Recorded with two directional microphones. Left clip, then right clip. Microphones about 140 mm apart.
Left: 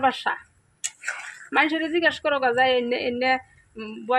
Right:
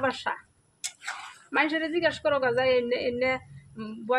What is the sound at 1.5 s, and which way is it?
A woman's voice, 45° left (ahead or behind).